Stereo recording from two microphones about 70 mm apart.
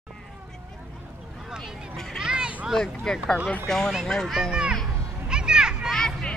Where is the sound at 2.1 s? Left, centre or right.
Centre.